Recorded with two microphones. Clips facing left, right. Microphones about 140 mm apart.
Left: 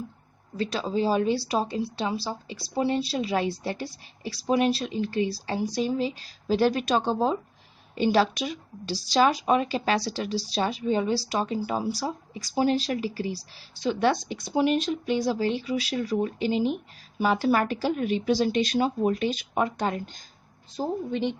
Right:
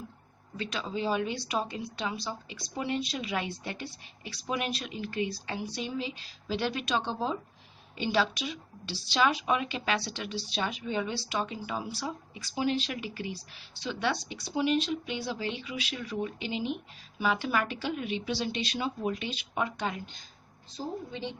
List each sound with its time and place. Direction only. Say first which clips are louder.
0.5 s a woman's voice: left 7 dB; 35° left (ahead or behind); by 21.3 s 65° left (ahead or behind)